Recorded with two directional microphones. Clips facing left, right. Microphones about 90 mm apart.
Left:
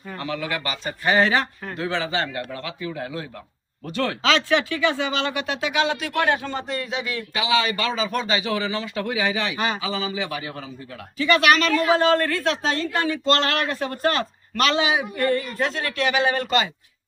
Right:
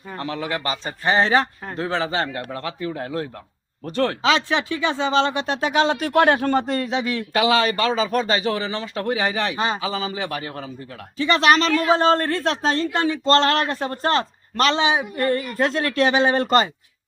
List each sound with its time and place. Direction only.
0.2 s a woman's voice: 35° right (ahead or behind)
4.2 s a woman's voice: 20° right (ahead or behind); by 6.7 s 55° right (ahead or behind)
6.7 s a woman's voice: 35° right (ahead or behind)
7.3 s a woman's voice: 40° right (ahead or behind)
11.2 s a woman's voice: 30° right (ahead or behind)